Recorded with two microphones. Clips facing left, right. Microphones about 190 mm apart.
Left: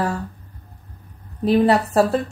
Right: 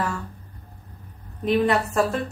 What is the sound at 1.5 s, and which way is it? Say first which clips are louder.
Speech: left 4 dB; 35° left (ahead or behind).